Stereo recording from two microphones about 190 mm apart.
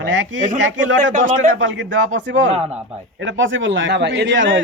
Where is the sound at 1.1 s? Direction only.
40° right (ahead or behind).